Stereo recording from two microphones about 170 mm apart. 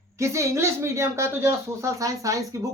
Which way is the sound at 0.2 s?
15° right (ahead or behind).